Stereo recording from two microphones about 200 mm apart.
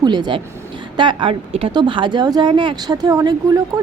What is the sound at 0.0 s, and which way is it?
Speech, 20° right (ahead or behind).